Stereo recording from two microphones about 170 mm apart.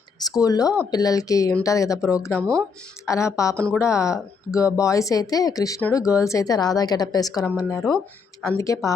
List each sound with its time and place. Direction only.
0.2 s speech: 20° left (ahead or behind)